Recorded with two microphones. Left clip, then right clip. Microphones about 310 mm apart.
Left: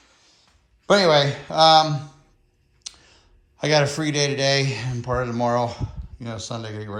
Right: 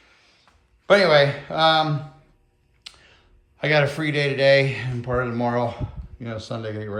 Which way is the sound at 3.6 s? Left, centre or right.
Centre.